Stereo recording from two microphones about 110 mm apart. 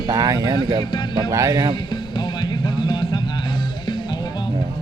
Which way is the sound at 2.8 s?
45° left (ahead or behind).